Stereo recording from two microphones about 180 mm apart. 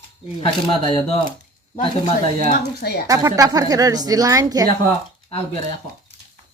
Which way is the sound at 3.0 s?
20° right (ahead or behind).